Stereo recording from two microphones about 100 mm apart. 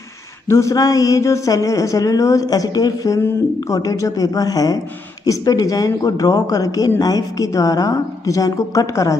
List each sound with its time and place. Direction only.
0.5 s speech: 30° left (ahead or behind)